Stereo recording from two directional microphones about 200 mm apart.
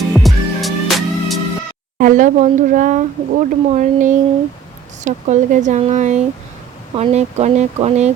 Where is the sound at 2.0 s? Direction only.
40° right (ahead or behind).